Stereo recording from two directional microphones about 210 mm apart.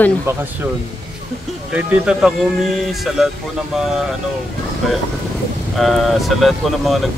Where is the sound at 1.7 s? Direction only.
5° right (ahead or behind).